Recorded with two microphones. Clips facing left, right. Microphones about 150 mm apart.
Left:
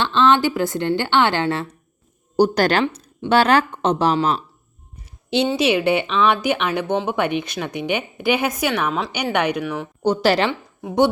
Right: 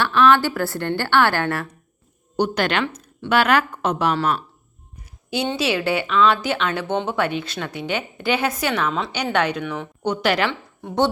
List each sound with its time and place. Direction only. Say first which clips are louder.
0.0 s a woman's voice: even; 20° left (ahead or behind)
2.3 s a woman's voice: left 5 dB; 40° left (ahead or behind)
5.5 s a woman's voice: left 2 dB; 20° left (ahead or behind)
6.9 s speech: left 2 dB; 5° left (ahead or behind)
7.2 s a woman's voice: left 2 dB; 15° left (ahead or behind)
9.1 s a woman's voice: left 1 dB; 15° left (ahead or behind)
10.0 s a woman's voice: left 3 dB; 35° left (ahead or behind)
10.8 s a woman's voice: left 3 dB; 10° left (ahead or behind)